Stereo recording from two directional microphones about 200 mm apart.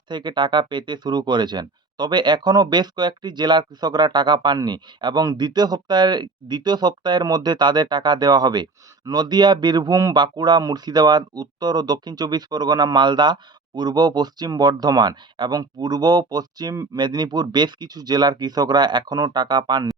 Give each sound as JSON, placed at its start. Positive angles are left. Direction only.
{"t": 0.1, "sound": "speech", "side_deg": -20}